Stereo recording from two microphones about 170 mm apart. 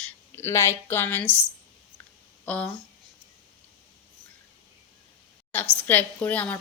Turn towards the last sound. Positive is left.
turn(degrees=10)  # may be behind; listen again after turning